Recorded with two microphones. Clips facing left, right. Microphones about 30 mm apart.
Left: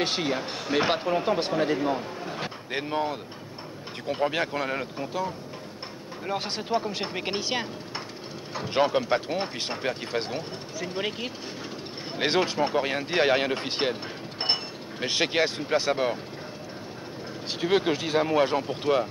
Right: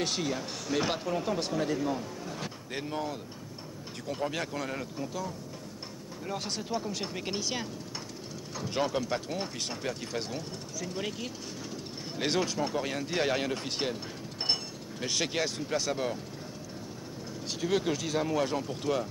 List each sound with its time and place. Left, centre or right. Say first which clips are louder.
0.0 s speech: left 5 dB; left
17.5 s speech: left 5 dB; left